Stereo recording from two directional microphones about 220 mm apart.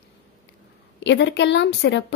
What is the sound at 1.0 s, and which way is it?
Speech, 55° left (ahead or behind).